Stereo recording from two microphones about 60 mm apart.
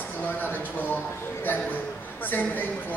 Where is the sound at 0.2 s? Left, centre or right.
Left.